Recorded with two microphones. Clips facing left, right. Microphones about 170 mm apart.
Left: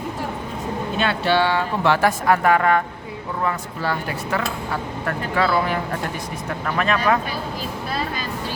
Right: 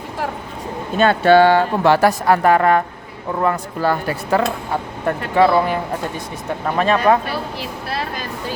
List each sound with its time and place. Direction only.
0.9 s speech: 50° right (ahead or behind)
5.0 s speech: 20° right (ahead or behind)